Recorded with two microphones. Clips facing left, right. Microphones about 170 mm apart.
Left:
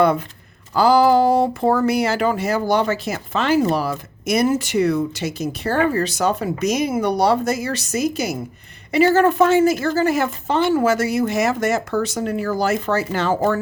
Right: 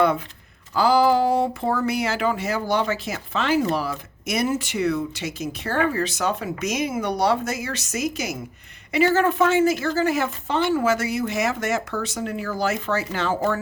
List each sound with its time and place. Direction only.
0.7 s speech: 40° left (ahead or behind)